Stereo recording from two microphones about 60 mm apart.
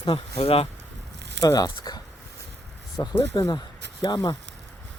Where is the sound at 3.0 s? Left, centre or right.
Left.